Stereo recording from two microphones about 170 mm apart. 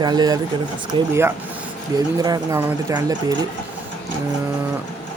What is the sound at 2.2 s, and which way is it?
Speech, 20° right (ahead or behind).